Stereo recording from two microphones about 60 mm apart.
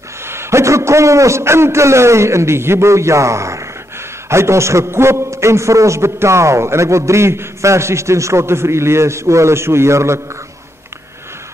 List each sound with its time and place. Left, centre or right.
0.2 s a man's voice: right